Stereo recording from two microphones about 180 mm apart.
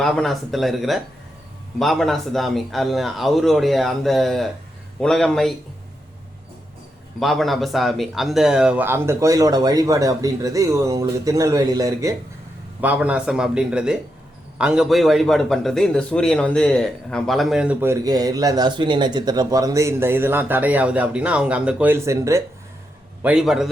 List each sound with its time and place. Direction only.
0.0 s speech: centre (ahead or behind)
7.2 s a man's voice: centre (ahead or behind); by 22.4 s 15° right (ahead or behind)
23.2 s speech: 5° right (ahead or behind)